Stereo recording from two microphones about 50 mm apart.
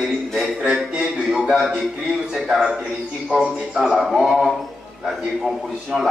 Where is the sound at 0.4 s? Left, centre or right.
Centre.